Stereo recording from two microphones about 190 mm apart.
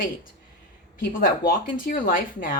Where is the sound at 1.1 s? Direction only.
50° left (ahead or behind).